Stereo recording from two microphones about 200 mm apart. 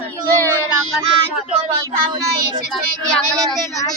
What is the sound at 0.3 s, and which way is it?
Child singing, 15° right (ahead or behind).